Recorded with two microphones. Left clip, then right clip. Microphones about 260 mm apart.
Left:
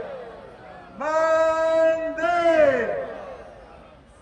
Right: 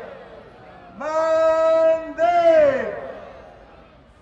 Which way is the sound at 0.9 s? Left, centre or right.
Centre.